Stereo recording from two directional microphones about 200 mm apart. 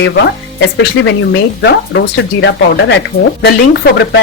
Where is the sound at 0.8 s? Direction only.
60° left (ahead or behind).